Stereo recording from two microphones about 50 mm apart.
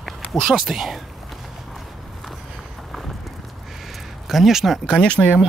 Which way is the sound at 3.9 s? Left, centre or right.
Centre.